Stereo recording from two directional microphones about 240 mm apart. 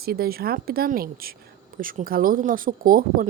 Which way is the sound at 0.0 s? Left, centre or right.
Right.